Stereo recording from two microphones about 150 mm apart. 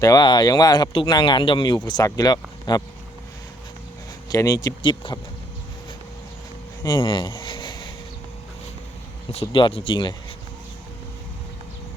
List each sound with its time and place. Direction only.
0.0 s speech: 25° left (ahead or behind)
4.3 s speech: 25° left (ahead or behind)
6.8 s a sound: 30° left (ahead or behind)
9.3 s speech: 35° left (ahead or behind)